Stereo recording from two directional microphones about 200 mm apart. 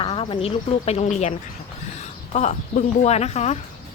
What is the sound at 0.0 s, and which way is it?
A woman's voice, 25° left (ahead or behind).